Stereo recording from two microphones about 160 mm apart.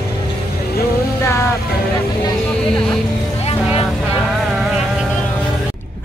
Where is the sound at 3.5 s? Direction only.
35° left (ahead or behind).